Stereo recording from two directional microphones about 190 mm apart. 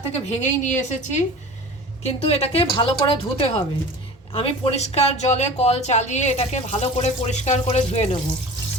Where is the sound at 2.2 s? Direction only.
30° left (ahead or behind).